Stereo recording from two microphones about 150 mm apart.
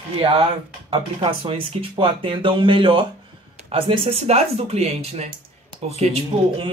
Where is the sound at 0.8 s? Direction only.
40° right (ahead or behind).